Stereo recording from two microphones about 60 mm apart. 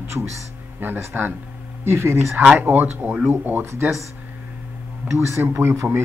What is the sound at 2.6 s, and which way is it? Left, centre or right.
Speech, right.